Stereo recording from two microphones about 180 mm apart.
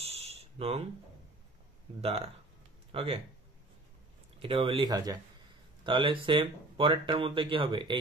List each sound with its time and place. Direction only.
0.0 s a sound: 35° right (ahead or behind)
2.0 s speech: 35° right (ahead or behind)
4.4 s speech: 30° right (ahead or behind)